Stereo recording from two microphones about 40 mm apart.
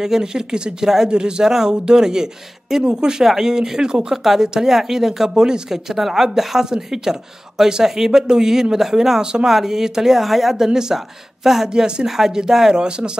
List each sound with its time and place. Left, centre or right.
0.0 s speech: centre
4.1 s speech: centre
9.2 s speech: centre
11.7 s speech: centre
12.1 s speech: centre